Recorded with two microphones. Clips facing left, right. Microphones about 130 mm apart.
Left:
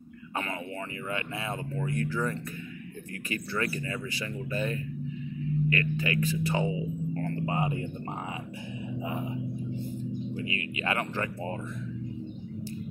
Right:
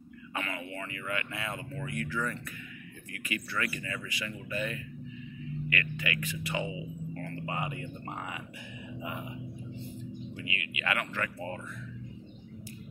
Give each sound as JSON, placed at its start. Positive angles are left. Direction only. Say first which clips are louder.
{"t": 1.0, "sound": "speech", "louder": "left 2 dB", "side_deg": 25}
{"t": 9.0, "sound": "speech", "louder": "left 5 dB", "side_deg": 30}